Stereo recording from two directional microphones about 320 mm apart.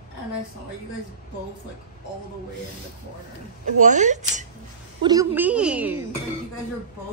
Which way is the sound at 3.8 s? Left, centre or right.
Right.